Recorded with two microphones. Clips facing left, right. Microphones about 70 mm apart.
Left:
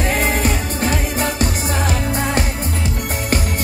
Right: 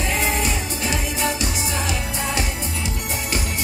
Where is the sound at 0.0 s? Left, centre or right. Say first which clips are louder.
Left 4 dB; left.